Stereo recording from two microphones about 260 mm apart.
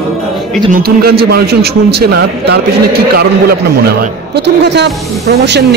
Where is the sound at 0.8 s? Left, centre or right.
Right.